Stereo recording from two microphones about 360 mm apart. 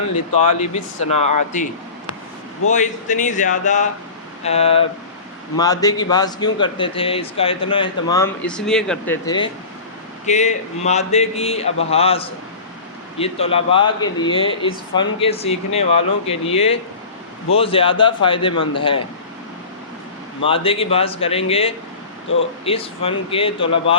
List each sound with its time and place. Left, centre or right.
0.3 s speech: centre
2.6 s speech: centre
20.5 s speech: centre